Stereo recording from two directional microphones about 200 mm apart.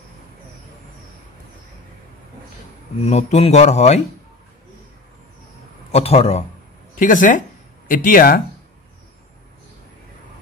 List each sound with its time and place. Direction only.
3.1 s speech: 35° left (ahead or behind)
5.9 s a man's voice: 30° left (ahead or behind)
7.0 s speech: 40° left (ahead or behind)